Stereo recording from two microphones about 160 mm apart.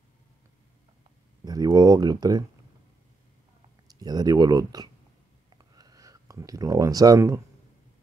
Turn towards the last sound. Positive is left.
turn(degrees=-20)  # may be behind; listen again after turning